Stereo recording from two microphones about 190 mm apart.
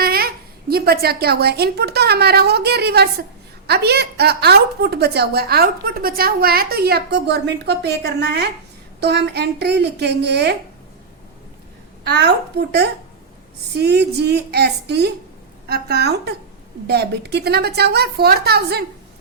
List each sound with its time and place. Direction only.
0.0 s a sound: 50° right (ahead or behind)
0.7 s a woman's voice: 55° right (ahead or behind)
12.0 s a woman's voice: 60° right (ahead or behind)